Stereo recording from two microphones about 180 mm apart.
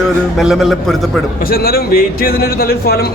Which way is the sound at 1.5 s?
55° left (ahead or behind).